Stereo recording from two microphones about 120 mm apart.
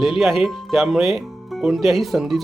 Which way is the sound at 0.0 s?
Centre (ahead or behind).